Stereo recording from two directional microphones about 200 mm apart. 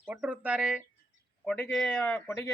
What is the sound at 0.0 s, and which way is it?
A man's voice, 5° right (ahead or behind).